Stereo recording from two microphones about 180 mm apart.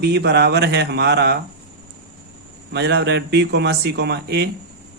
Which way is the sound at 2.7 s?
70° right (ahead or behind).